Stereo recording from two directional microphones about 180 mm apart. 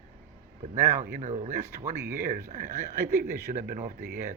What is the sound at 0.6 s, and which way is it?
Speech, 40° right (ahead or behind).